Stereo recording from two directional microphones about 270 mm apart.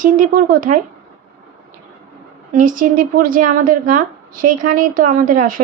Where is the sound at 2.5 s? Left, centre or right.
Right.